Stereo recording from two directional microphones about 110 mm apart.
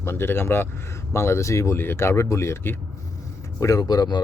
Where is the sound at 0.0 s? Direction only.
20° left (ahead or behind).